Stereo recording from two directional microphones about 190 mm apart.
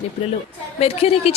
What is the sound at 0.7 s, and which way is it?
Speech, 30° left (ahead or behind).